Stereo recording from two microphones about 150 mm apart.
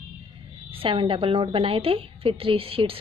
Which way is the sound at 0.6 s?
35° right (ahead or behind).